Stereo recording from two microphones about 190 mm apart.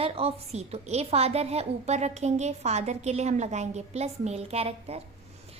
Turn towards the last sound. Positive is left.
turn(degrees=-30)  # may be behind; listen again after turning